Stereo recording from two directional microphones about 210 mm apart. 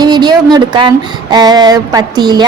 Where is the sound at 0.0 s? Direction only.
20° right (ahead or behind).